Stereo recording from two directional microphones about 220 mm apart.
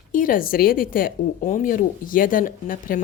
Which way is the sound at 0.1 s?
40° left (ahead or behind).